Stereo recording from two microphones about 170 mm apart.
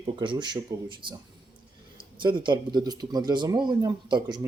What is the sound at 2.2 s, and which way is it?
Speech, 30° right (ahead or behind).